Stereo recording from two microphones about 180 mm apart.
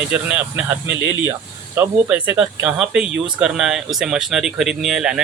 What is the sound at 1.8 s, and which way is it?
Speech, 10° right (ahead or behind).